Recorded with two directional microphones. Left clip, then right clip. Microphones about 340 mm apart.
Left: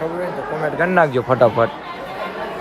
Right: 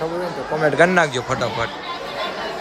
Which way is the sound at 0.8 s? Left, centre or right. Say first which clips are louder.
Left 2 dB; centre.